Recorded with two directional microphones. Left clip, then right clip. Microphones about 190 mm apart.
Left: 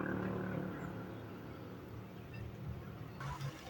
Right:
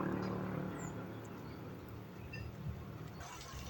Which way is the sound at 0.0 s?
60° right (ahead or behind).